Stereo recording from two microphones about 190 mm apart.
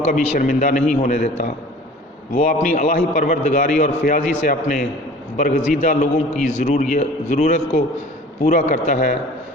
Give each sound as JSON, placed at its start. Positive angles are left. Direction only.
{"t": 0.1, "sound": "a man's voice", "side_deg": 45}